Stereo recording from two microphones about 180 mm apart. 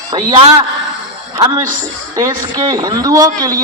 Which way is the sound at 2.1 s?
20° right (ahead or behind).